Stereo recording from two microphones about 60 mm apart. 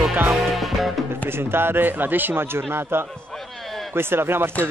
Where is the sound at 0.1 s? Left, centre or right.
Right.